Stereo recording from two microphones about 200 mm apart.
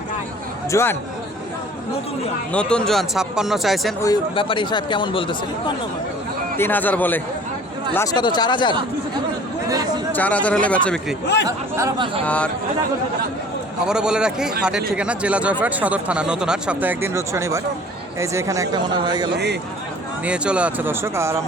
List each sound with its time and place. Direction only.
0.7 s speech: 15° left (ahead or behind)
2.5 s speech: 5° left (ahead or behind)
4.0 s speech: 20° left (ahead or behind)
6.6 s speech: 10° left (ahead or behind)
7.9 s speech: 20° left (ahead or behind)
10.2 s speech: 5° left (ahead or behind)
11.4 s speech: 15° right (ahead or behind)
12.2 s speech: 5° left (ahead or behind)
13.8 s speech: 5° right (ahead or behind); by 19.3 s 20° right (ahead or behind)
20.2 s speech: 5° right (ahead or behind)